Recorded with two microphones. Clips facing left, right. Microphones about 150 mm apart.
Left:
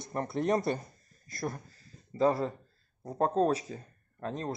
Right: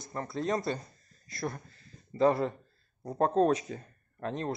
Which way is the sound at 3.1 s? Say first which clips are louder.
Right 2 dB; 5° left (ahead or behind).